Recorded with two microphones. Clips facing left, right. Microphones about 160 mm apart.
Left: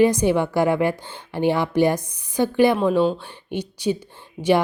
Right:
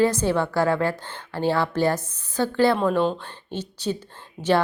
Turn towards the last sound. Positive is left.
turn(degrees=10)  # may be behind; listen again after turning